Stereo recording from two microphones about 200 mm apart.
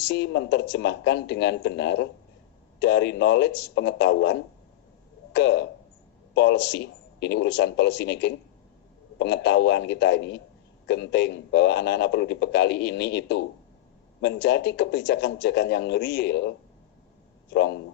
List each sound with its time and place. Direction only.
0.0 s speech: 60° left (ahead or behind)